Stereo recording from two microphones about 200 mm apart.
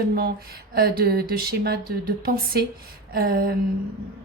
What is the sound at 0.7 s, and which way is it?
Speech, 50° right (ahead or behind).